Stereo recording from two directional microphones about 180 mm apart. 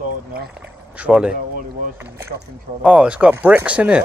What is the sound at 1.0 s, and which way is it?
Speech, 5° right (ahead or behind).